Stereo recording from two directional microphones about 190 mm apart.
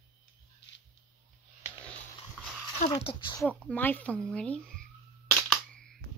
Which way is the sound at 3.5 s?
10° left (ahead or behind).